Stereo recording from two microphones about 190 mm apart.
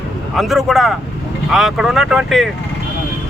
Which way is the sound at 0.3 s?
Centre (ahead or behind).